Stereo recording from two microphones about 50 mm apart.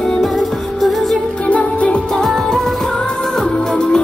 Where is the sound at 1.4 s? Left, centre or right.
Left.